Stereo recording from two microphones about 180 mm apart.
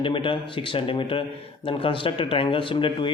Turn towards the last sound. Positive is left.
turn(degrees=30)  # may be behind; listen again after turning